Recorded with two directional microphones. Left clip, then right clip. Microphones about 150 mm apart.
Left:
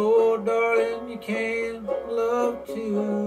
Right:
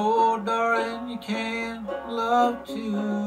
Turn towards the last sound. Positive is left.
turn(degrees=5)  # may be behind; listen again after turning